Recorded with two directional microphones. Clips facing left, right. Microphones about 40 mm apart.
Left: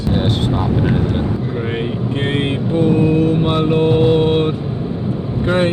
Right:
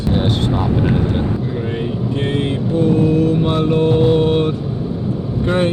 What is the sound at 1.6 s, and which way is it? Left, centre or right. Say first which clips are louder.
Vehicle: left 1 dB; left.